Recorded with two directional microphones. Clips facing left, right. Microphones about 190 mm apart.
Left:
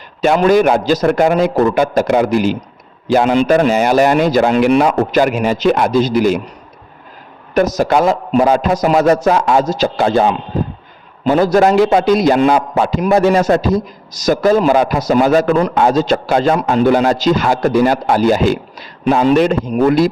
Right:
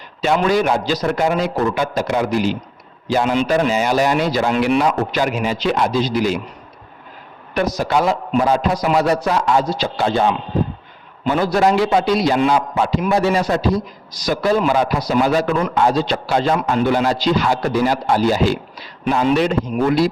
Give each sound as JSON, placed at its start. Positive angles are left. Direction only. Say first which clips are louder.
{"t": 0.2, "sound": "a man's voice", "louder": "left 6 dB", "side_deg": 50}
{"t": 7.5, "sound": "a man's voice", "louder": "left 5 dB", "side_deg": 45}
{"t": 11.3, "sound": "a man's voice", "louder": "left 5 dB", "side_deg": 45}